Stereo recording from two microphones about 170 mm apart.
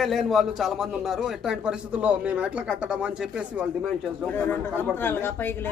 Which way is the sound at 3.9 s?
5° left (ahead or behind).